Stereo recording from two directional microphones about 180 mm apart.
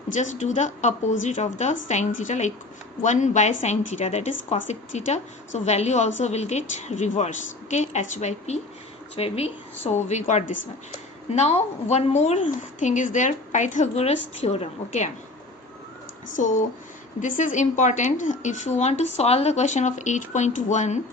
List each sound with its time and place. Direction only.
0.1 s a woman's voice: 40° left (ahead or behind)
16.2 s a woman's voice: 45° left (ahead or behind)